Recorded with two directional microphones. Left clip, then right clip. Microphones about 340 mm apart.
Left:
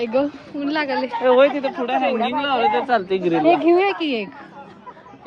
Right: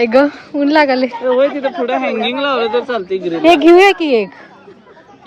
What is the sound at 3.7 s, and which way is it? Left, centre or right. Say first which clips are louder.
Speech: right 10 dB; right.